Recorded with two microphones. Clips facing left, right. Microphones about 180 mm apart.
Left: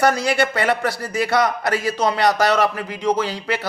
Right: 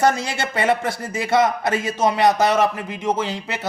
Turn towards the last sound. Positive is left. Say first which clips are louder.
# left 2 dB
turn(degrees=-20)  # may be behind; listen again after turning